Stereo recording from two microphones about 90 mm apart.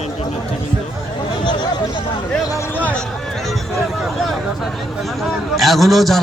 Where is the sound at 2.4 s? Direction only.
40° left (ahead or behind).